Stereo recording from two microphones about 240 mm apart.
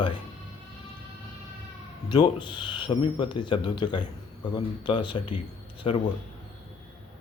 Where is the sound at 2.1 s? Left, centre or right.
Centre.